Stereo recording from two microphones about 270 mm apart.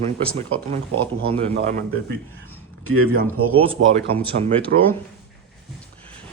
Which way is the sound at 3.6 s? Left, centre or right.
Right.